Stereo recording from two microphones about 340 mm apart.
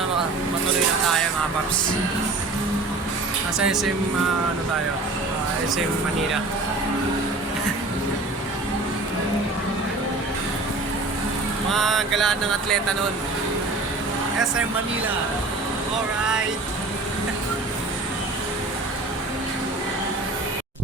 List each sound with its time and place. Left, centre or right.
3.6 s speech: centre
11.7 s speech: centre